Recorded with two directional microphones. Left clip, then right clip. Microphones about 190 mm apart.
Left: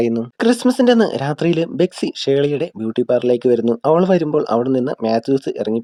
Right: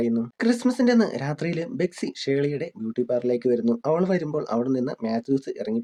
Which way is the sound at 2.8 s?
45° left (ahead or behind).